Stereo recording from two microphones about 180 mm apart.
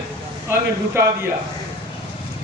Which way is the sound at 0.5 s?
15° right (ahead or behind).